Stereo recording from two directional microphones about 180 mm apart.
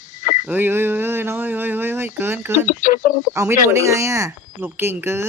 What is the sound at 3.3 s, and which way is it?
Speech, 15° right (ahead or behind).